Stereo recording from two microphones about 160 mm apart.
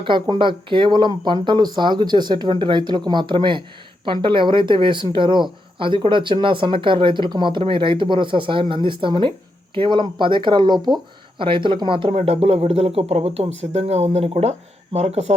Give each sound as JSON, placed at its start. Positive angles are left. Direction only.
{"t": 0.0, "sound": "speech", "side_deg": -30}